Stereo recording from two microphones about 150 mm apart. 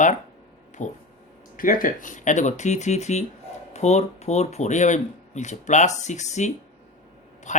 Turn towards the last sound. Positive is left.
turn(degrees=50)  # may be behind; listen again after turning